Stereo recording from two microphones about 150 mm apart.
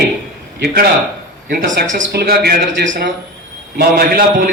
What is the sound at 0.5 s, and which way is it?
A man's voice, 90° right.